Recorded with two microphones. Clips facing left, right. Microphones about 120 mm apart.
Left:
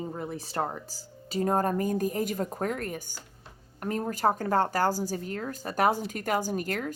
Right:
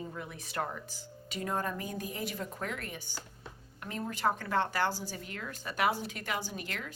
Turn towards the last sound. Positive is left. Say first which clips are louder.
# left 10 dB
turn(degrees=45)  # may be behind; listen again after turning